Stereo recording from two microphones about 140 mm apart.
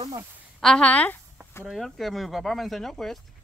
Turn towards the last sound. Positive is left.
turn(degrees=5)  # may be behind; listen again after turning